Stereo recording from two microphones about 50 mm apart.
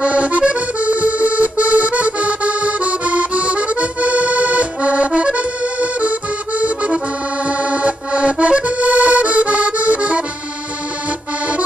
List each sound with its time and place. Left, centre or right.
0.0 s accordion: right